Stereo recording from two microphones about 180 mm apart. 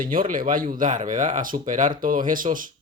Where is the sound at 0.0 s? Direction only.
50° right (ahead or behind).